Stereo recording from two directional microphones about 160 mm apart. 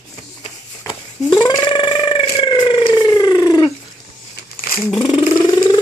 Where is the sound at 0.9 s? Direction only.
30° left (ahead or behind).